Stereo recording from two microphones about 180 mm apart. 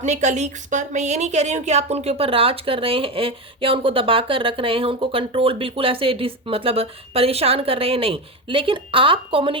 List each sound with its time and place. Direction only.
0.0 s speech: 40° right (ahead or behind)